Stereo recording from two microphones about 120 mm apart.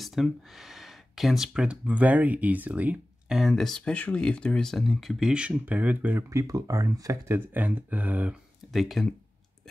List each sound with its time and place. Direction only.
0.0 s speech: centre (ahead or behind)
6.3 s speech: 30° right (ahead or behind)
8.7 s speech: centre (ahead or behind)